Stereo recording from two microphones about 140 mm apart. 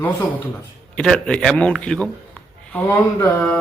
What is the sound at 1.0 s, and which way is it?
A man's voice, 5° left (ahead or behind).